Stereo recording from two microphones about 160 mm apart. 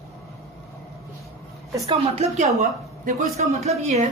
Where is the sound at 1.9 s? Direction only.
40° right (ahead or behind).